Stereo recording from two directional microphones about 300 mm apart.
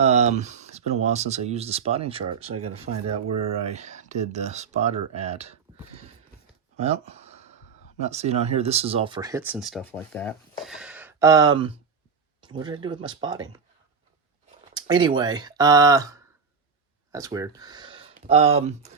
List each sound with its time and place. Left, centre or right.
0.0 s speech: right
2.9 s speech: right
6.7 s a sound: right
7.9 s speech: right
14.7 s speech: centre